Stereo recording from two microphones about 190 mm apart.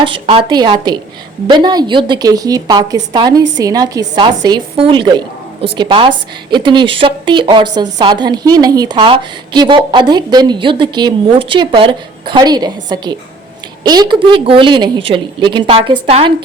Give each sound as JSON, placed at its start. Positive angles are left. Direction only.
{"t": 0.0, "sound": "a woman's voice", "side_deg": -30}